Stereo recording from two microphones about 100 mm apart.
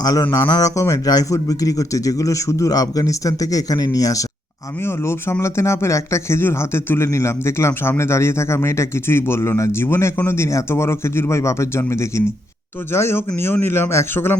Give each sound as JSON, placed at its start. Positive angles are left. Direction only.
{"t": 0.0, "sound": "a man's voice", "side_deg": 40}
{"t": 5.0, "sound": "speech", "side_deg": 25}
{"t": 12.9, "sound": "speech", "side_deg": 25}